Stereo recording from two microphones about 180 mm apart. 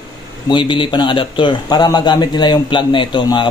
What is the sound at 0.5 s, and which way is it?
Speech, 25° left (ahead or behind).